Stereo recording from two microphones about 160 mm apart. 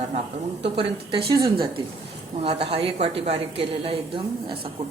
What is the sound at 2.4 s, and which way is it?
A woman's voice, 35° right (ahead or behind).